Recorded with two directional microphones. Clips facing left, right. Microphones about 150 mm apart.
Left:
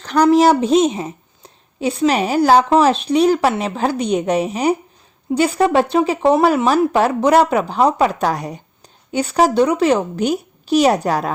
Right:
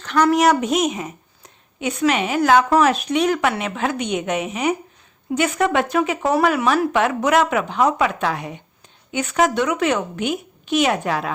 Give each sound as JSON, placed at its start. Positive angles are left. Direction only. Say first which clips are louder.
{"t": 0.0, "sound": "a woman's voice", "louder": "left 4 dB", "side_deg": 35}